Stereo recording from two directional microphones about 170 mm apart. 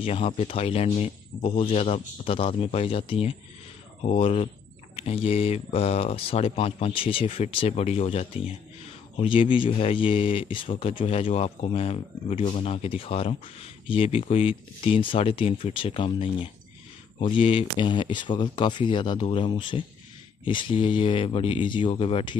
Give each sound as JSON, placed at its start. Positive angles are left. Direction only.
{"t": 0.0, "sound": "a man's voice", "side_deg": 35}